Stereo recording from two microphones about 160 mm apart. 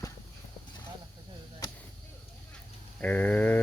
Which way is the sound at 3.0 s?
10° left (ahead or behind).